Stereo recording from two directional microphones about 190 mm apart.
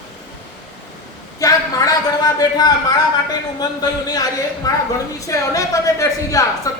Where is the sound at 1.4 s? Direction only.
20° left (ahead or behind).